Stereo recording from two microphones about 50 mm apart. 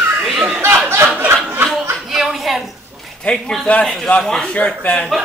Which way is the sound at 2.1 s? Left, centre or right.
Centre.